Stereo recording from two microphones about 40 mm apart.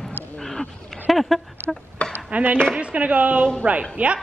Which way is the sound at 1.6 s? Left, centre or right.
Right.